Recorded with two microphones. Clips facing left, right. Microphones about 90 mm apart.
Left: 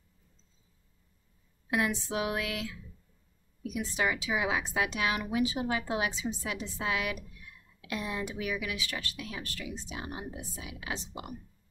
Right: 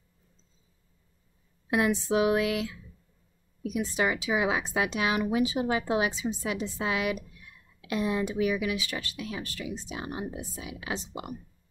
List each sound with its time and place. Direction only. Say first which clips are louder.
1.7 s speech: right 5 dB; 20° right (ahead or behind)
3.7 s speech: right 3 dB; 20° right (ahead or behind)